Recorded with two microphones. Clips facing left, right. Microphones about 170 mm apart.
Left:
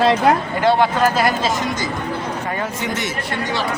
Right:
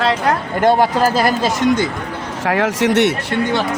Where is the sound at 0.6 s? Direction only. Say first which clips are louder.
Right 2 dB; 45° right (ahead or behind).